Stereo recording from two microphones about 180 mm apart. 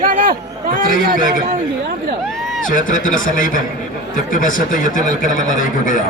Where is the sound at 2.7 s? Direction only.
50° left (ahead or behind).